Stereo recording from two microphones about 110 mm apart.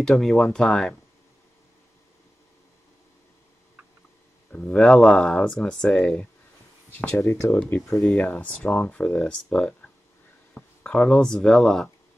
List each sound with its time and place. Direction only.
0.0 s speech: 5° left (ahead or behind)
4.5 s speech: 10° left (ahead or behind)
7.2 s speech: 25° left (ahead or behind)
8.0 s speech: centre (ahead or behind)
8.3 s speech: 10° left (ahead or behind)